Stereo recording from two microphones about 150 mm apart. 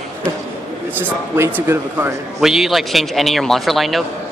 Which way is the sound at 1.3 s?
15° right (ahead or behind).